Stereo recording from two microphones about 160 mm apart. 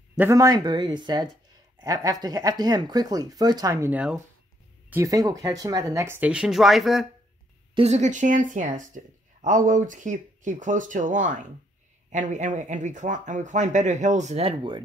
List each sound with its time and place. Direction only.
0.2 s speech: 20° right (ahead or behind); by 7.1 s centre (ahead or behind)
7.7 s speech: 40° right (ahead or behind)